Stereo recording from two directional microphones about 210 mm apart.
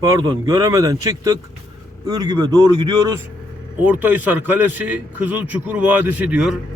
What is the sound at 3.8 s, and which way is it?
A man's voice, 10° right (ahead or behind).